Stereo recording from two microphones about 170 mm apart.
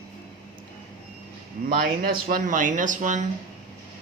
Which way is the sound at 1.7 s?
60° right (ahead or behind).